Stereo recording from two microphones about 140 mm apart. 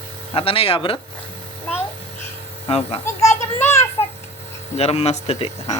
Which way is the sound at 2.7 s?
45° left (ahead or behind).